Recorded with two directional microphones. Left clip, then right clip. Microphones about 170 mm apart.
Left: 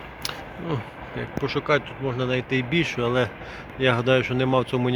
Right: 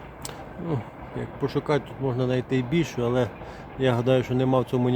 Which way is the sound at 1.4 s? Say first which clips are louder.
Left 2 dB; 35° right (ahead or behind).